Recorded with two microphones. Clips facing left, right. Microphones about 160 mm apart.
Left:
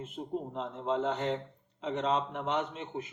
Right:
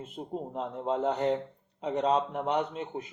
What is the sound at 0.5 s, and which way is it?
A man's voice, 40° right (ahead or behind).